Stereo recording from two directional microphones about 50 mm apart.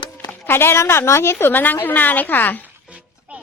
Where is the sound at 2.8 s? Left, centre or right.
Right.